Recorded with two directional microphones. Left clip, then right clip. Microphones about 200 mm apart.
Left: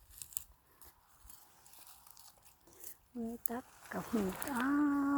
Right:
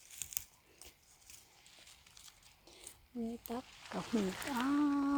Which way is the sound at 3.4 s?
5° left (ahead or behind).